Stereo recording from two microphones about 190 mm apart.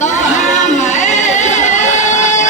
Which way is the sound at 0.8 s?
40° left (ahead or behind).